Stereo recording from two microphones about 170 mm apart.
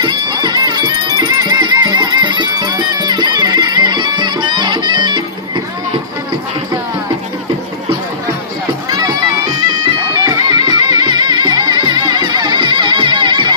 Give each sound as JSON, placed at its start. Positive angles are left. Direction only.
{"t": 0.0, "sound": "music", "side_deg": -25}
{"t": 10.2, "sound": "music", "side_deg": -25}